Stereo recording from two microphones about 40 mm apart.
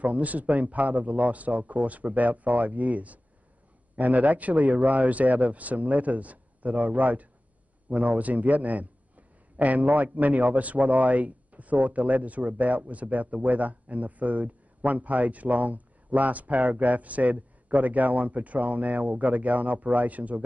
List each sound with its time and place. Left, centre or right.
0.0 s a man's voice: right